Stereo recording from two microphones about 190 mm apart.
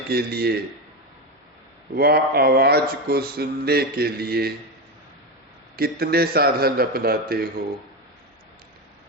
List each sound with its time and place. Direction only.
0.1 s speech: 55° right (ahead or behind)
2.0 s speech: 55° right (ahead or behind)
5.7 s a man's voice: 55° right (ahead or behind)